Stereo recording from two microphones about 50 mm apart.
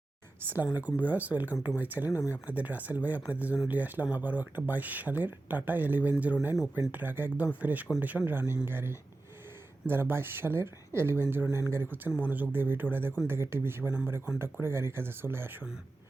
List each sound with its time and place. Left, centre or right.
0.4 s speech: right